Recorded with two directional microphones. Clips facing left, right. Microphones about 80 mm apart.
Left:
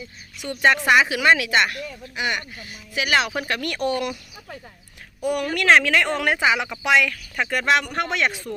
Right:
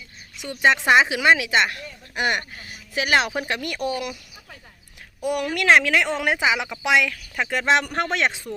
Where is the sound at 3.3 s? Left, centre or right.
Centre.